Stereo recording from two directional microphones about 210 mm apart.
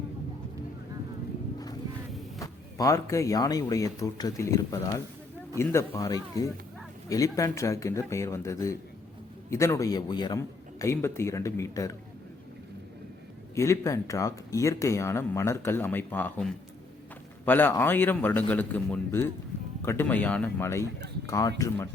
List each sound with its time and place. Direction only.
2.4 s speech: 15° left (ahead or behind)
13.6 s speech: 15° left (ahead or behind)